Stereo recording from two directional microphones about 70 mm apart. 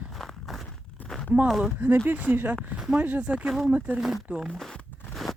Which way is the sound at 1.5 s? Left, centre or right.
Centre.